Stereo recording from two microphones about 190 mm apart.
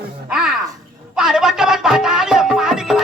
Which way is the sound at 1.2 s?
Centre (ahead or behind).